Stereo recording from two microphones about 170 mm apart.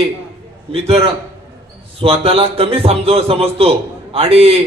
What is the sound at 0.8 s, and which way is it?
A man's voice, 35° right (ahead or behind).